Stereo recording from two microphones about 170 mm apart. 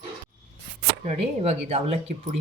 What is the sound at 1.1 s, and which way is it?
Speech, 40° right (ahead or behind).